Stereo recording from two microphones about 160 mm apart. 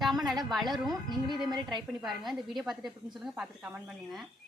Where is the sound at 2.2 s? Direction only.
Centre (ahead or behind).